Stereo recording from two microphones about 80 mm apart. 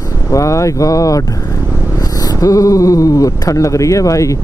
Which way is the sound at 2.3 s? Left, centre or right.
Left.